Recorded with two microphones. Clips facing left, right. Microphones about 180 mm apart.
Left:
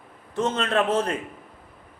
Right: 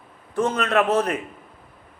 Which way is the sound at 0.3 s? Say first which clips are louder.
Right 2 dB; 25° left (ahead or behind).